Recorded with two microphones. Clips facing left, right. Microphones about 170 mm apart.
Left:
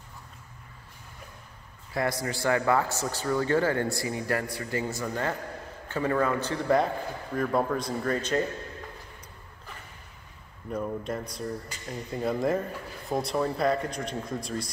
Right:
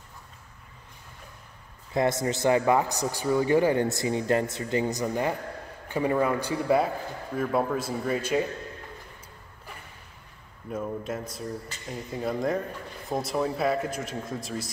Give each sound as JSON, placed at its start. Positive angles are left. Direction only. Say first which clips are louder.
{"t": 2.0, "sound": "a man's voice", "louder": "right 4 dB", "side_deg": -20}
{"t": 10.7, "sound": "a man's voice", "louder": "even", "side_deg": -5}